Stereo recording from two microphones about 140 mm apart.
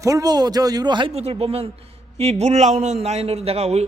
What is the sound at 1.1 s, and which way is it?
A man's voice, 45° right (ahead or behind).